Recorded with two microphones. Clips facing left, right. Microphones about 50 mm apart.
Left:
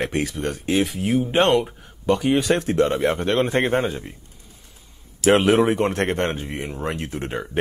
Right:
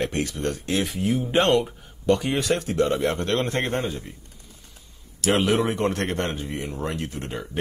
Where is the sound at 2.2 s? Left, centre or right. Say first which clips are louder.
Left 5 dB; centre.